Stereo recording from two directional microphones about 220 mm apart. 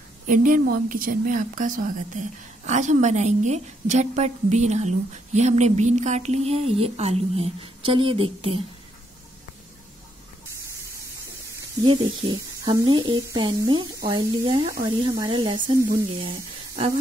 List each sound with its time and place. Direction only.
0.3 s a woman's voice: 40° right (ahead or behind)
11.8 s speech: 20° right (ahead or behind)